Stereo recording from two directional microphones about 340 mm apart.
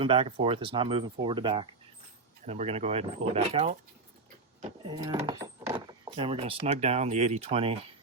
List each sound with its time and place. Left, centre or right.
0.0 s speech: centre
4.9 s speech: centre